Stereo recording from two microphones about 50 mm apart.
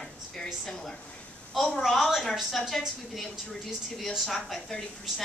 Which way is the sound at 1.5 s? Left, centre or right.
Centre.